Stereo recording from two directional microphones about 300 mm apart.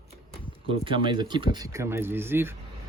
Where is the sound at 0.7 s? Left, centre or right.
Centre.